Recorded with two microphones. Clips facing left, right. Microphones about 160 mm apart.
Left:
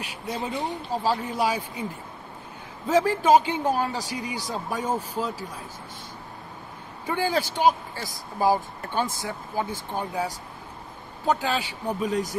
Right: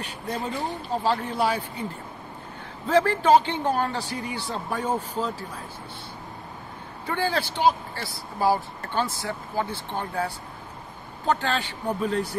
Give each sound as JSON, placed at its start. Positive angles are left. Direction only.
{"t": 0.0, "sound": "speech", "side_deg": 10}
{"t": 2.9, "sound": "speech", "side_deg": 10}
{"t": 7.1, "sound": "speech", "side_deg": 15}